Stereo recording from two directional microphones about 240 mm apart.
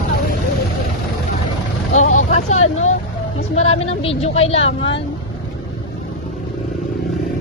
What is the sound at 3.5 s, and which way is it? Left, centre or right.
A woman's voice, left.